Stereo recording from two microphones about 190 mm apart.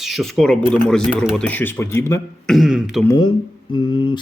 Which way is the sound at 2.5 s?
Centre (ahead or behind).